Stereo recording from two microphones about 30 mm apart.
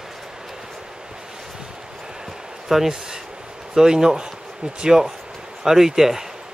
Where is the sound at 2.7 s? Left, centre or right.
Centre.